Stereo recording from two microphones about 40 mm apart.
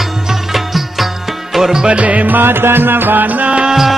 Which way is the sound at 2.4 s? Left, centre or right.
Right.